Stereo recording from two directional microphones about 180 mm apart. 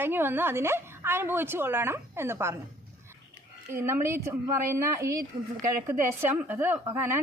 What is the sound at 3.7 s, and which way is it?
Speech, 15° right (ahead or behind).